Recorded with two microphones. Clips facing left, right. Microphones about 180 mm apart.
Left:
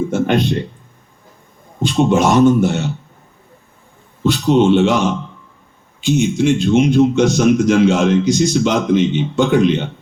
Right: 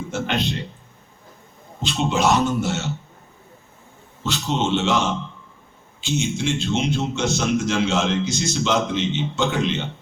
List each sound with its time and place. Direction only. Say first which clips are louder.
0.3 s a man's voice: left 9 dB; 50° left (ahead or behind)
1.8 s a man's voice: left 7 dB; 55° left (ahead or behind)
4.2 s speech: left 11 dB; 55° left (ahead or behind)